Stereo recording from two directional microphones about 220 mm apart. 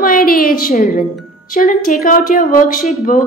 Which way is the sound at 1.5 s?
40° left (ahead or behind).